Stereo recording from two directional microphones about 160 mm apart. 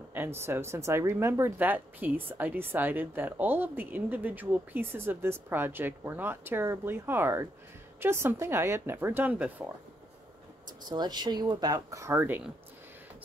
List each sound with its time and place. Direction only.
0.1 s speech: 15° right (ahead or behind)
10.9 s speech: 25° right (ahead or behind)